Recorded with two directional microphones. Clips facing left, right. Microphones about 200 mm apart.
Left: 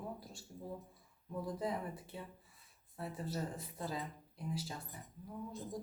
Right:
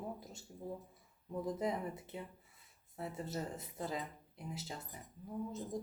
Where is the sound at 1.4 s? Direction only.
20° right (ahead or behind).